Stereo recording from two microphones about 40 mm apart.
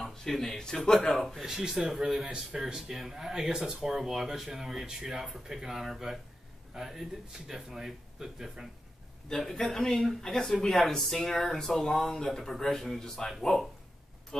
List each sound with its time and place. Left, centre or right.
0.0 s speech: centre
1.2 s speech: centre
1.6 s speech: centre
9.3 s a man's voice: centre
9.8 s speech: centre